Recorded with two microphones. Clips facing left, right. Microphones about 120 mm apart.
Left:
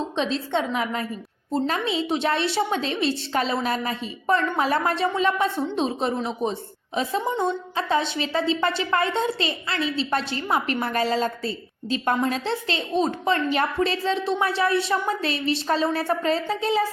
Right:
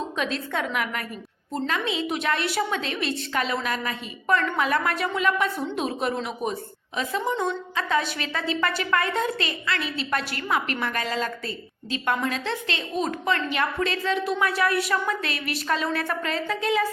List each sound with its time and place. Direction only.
0.2 s a woman's voice: 30° left (ahead or behind)